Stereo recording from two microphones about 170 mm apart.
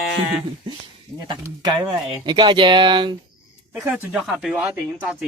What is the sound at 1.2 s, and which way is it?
Speech, 25° right (ahead or behind).